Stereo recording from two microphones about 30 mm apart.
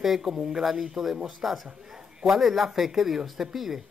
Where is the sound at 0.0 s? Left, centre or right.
Centre.